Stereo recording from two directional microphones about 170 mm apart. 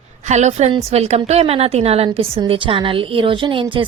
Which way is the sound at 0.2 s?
45° right (ahead or behind).